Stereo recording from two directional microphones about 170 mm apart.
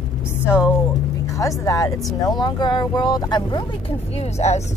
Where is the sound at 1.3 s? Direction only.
20° left (ahead or behind).